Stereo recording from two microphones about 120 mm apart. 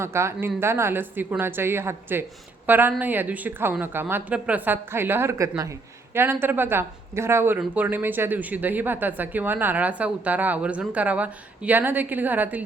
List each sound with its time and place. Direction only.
0.0 s a woman's voice: 20° right (ahead or behind)